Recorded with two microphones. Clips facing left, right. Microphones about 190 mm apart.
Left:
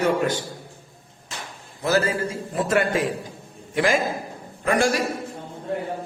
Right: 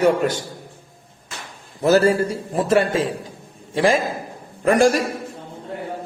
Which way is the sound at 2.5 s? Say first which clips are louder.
Right 3 dB; 30° right (ahead or behind).